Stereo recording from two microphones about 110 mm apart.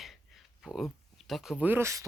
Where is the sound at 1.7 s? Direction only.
25° right (ahead or behind).